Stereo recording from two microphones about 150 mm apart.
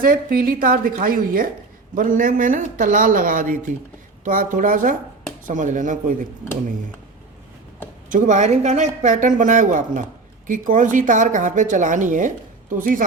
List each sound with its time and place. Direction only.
0.0 s a woman's voice: 75° right (ahead or behind); by 6.1 s 60° right (ahead or behind)
8.1 s speech: 60° right (ahead or behind)